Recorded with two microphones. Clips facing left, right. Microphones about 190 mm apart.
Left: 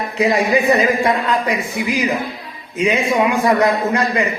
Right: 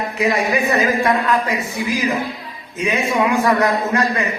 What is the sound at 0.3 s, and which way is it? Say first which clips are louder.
A man's voice: left 5 dB; 20° left (ahead or behind).